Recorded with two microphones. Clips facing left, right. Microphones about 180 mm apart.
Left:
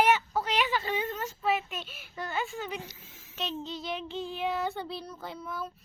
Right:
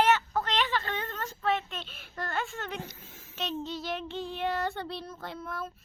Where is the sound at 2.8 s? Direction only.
50° right (ahead or behind).